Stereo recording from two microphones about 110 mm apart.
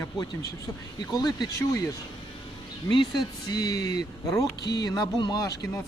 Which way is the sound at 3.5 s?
35° left (ahead or behind).